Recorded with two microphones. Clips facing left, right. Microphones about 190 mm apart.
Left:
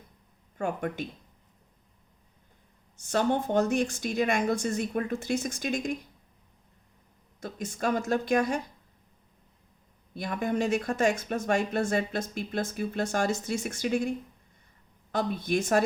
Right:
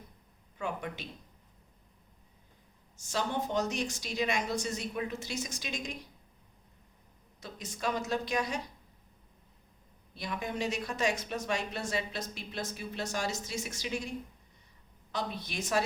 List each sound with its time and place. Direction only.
0.5 s speech: 50° left (ahead or behind)
3.0 s speech: 55° left (ahead or behind)
7.4 s speech: 50° left (ahead or behind)
10.2 s speech: 50° left (ahead or behind)
15.1 s speech: 50° left (ahead or behind)